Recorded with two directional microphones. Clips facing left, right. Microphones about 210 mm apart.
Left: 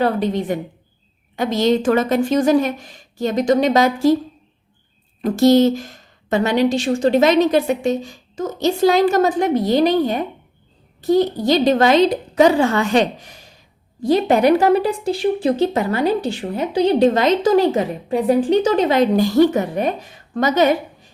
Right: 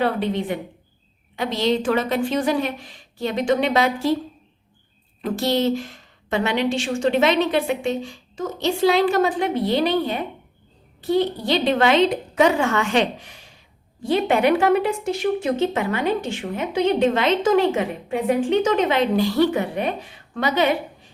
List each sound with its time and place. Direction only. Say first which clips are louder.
0.0 s a woman's voice: left 3 dB; 40° left (ahead or behind)
5.2 s a woman's voice: left 8 dB; 45° left (ahead or behind)